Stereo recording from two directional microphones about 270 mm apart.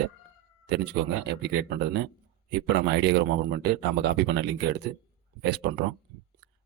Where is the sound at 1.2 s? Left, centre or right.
Right.